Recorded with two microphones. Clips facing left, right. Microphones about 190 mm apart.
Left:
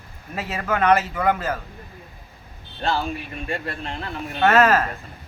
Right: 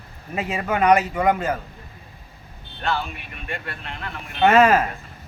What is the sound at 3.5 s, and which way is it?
Speech, 35° left (ahead or behind).